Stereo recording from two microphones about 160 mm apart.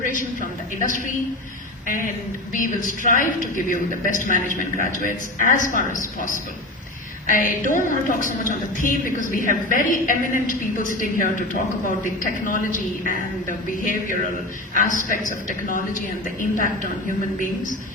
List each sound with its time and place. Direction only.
0.0 s a man's voice: 55° left (ahead or behind)
2.5 s a woman's voice: 55° left (ahead or behind)
7.3 s a woman's voice: 55° left (ahead or behind)